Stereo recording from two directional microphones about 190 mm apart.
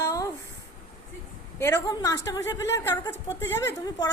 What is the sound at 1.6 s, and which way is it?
A woman's voice, 15° left (ahead or behind).